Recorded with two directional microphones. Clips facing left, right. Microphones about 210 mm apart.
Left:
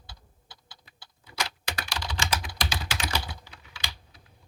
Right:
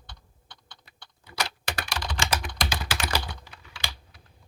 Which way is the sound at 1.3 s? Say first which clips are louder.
Right 2 dB; 60° right (ahead or behind).